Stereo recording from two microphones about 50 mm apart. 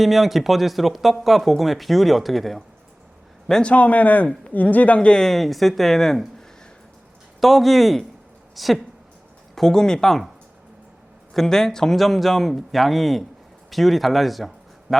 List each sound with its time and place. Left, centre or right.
0.0 s speech: centre
3.6 s speech: left
5.2 s speech: centre
7.4 s a woman's voice: centre
9.6 s speech: centre
11.3 s speech: centre